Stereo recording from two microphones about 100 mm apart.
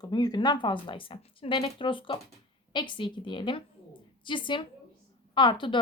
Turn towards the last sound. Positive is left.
turn(degrees=50)  # may be behind; listen again after turning